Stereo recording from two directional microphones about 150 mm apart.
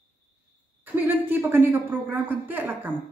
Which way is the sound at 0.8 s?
15° right (ahead or behind).